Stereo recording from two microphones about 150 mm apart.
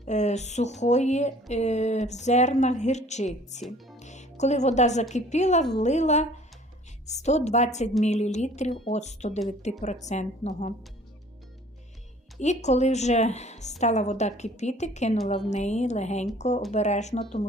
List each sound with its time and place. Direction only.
0.0 s speech: 50° left (ahead or behind)
12.4 s speech: 50° left (ahead or behind)